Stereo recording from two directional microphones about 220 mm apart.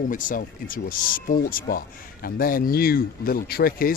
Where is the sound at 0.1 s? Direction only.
40° left (ahead or behind).